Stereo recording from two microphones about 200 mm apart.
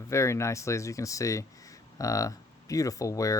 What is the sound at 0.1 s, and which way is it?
Speech, 15° left (ahead or behind).